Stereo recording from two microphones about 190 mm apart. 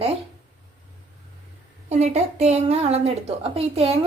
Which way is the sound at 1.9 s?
35° right (ahead or behind).